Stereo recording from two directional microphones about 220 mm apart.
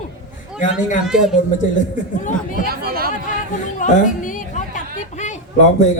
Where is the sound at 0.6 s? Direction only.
35° left (ahead or behind).